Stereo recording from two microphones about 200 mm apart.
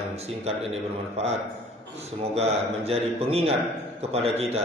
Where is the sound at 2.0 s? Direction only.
30° right (ahead or behind).